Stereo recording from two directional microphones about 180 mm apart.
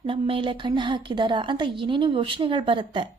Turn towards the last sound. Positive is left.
turn(degrees=-30)  # may be behind; listen again after turning